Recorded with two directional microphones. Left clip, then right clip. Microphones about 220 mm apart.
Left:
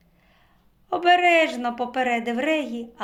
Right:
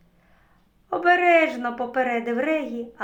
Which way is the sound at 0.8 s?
35° left (ahead or behind).